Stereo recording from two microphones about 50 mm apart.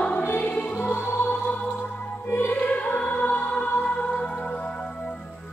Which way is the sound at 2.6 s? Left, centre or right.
Left.